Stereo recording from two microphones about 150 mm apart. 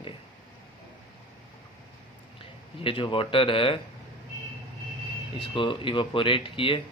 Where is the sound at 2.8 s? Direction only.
35° left (ahead or behind).